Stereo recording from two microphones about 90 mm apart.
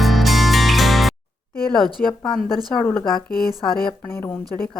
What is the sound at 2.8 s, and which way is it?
Speech, 20° left (ahead or behind).